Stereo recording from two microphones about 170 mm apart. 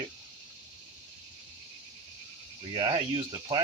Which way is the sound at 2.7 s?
25° right (ahead or behind).